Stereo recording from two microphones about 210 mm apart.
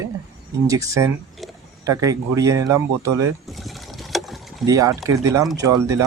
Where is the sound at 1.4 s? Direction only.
Centre (ahead or behind).